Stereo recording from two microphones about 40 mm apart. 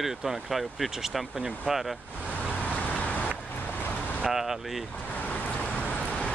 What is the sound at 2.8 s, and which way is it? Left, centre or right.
Vehicle, left.